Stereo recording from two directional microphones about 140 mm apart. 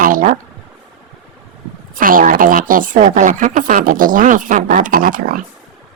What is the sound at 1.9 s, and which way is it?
A woman's voice, 80° right.